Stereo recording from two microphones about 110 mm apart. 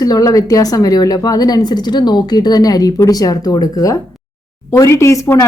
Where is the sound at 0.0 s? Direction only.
35° left (ahead or behind).